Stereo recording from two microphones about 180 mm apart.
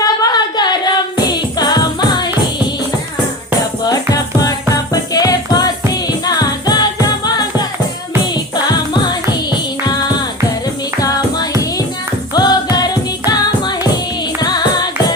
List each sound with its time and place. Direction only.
0.0 s a sound: 20° left (ahead or behind)
1.2 s music: 25° left (ahead or behind)
4.1 s music: 20° left (ahead or behind)
8.2 s music: 25° left (ahead or behind)
12.3 s music: 20° left (ahead or behind)